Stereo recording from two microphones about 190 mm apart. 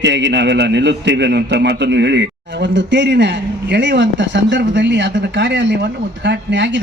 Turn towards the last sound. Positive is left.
turn(degrees=-70)  # may be behind; listen again after turning